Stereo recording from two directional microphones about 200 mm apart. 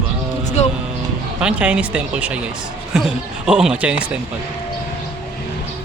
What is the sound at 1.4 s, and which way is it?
Speech, 5° right (ahead or behind).